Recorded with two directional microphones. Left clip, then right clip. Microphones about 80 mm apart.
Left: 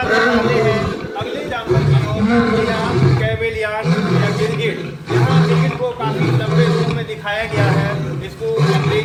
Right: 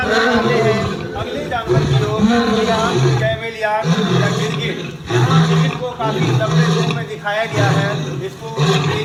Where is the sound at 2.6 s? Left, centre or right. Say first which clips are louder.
Right 3 dB; left.